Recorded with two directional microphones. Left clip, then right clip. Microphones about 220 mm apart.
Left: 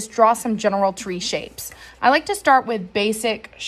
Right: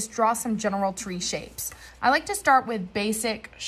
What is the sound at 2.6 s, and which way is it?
Speech, 30° left (ahead or behind).